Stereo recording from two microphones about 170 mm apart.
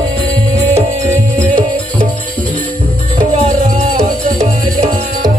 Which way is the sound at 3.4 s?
45° right (ahead or behind).